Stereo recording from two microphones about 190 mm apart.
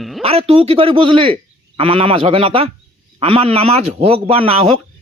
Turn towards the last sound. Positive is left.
turn(degrees=-30)  # may be behind; listen again after turning